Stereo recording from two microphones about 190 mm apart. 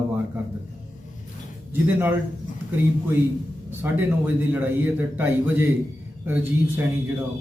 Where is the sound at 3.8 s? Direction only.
10° right (ahead or behind).